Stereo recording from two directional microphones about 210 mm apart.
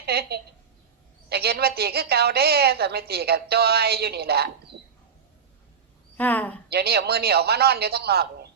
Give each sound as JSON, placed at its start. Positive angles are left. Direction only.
{"t": 0.0, "sound": "a woman's voice", "side_deg": -50}
{"t": 6.1, "sound": "a woman's voice", "side_deg": 10}
{"t": 6.7, "sound": "a woman's voice", "side_deg": -50}